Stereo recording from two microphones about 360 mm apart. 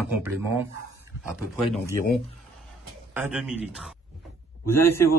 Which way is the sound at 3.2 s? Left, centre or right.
Centre.